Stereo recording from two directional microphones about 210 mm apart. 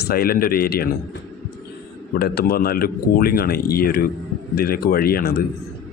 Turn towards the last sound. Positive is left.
turn(degrees=45)  # may be behind; listen again after turning